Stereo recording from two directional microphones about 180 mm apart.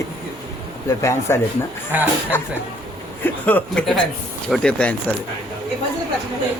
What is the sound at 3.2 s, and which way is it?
Speech, 10° left (ahead or behind).